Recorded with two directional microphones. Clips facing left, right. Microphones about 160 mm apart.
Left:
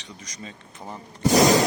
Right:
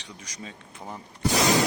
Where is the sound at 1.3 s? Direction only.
40° left (ahead or behind).